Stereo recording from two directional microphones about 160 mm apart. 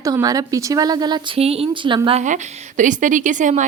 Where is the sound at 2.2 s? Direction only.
50° right (ahead or behind).